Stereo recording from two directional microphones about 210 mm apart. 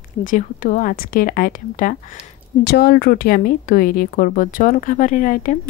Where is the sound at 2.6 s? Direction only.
50° left (ahead or behind).